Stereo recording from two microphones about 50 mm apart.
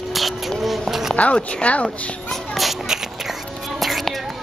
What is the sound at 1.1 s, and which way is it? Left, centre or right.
Speech, left.